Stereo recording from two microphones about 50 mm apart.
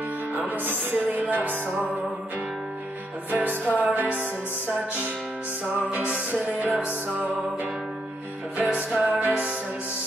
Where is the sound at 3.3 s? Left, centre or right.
Right.